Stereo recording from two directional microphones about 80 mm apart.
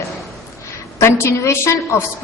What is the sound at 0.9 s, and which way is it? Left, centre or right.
A woman's voice, left.